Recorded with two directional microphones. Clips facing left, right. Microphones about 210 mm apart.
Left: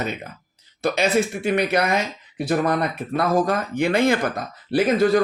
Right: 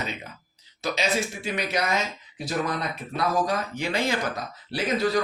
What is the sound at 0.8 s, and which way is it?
Speech, 55° left (ahead or behind).